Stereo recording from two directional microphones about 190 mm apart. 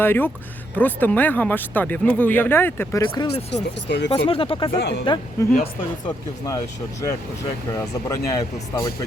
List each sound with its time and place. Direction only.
0.0 s speech: 10° left (ahead or behind)
3.5 s speech: 65° left (ahead or behind)
4.3 s speech: 30° left (ahead or behind)
4.8 s speech: 60° left (ahead or behind)
5.0 s speech: 25° left (ahead or behind)
7.8 s speech: 15° left (ahead or behind)